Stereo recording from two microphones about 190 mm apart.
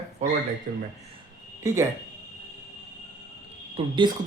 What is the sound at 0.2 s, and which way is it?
Speech, 35° right (ahead or behind).